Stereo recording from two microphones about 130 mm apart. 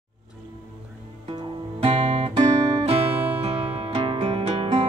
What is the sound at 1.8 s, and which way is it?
Guitar, 50° right (ahead or behind).